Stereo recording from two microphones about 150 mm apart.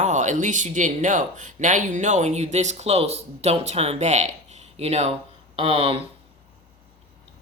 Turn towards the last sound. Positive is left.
turn(degrees=-40)  # may be behind; listen again after turning